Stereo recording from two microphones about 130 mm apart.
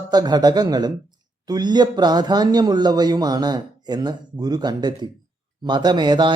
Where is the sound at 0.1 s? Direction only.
30° right (ahead or behind).